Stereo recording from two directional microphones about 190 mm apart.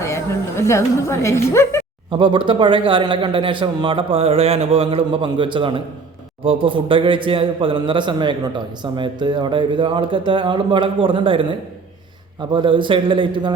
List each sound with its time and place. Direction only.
0.0 s a woman's voice: 15° left (ahead or behind)
2.0 s speech: 25° right (ahead or behind)